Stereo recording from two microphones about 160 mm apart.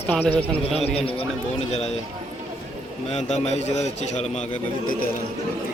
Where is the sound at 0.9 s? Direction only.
35° left (ahead or behind).